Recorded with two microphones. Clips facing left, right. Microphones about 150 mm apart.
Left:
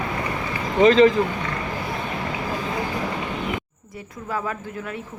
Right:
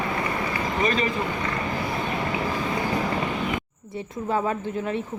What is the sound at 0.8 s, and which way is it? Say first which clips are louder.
Speech: left 12 dB; 90° left.